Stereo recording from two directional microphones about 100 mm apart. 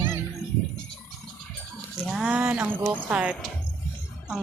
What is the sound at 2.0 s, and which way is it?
Speech, 5° right (ahead or behind).